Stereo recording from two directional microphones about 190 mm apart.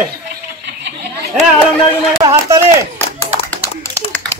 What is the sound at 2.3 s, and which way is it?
Speech, 15° right (ahead or behind).